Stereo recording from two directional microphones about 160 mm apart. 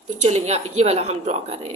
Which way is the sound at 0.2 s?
45° right (ahead or behind).